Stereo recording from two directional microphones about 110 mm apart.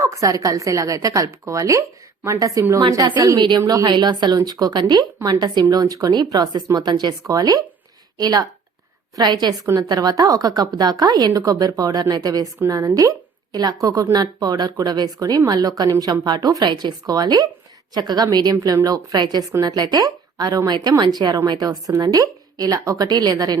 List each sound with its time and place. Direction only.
0.0 s a woman's voice: 30° right (ahead or behind)